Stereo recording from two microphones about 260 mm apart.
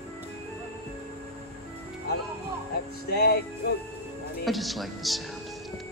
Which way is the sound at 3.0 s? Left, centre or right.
Left.